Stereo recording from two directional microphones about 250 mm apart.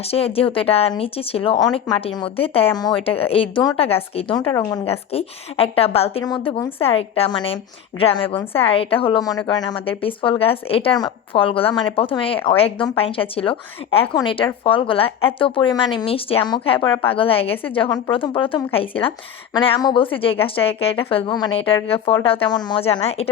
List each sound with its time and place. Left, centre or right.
0.1 s speech: left